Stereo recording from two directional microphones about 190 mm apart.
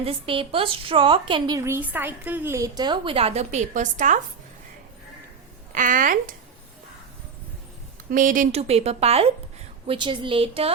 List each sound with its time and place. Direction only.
0.0 s a woman's voice: 30° right (ahead or behind)
5.7 s speech: 45° right (ahead or behind)
8.1 s a woman's voice: 45° right (ahead or behind); by 10.7 s 30° right (ahead or behind)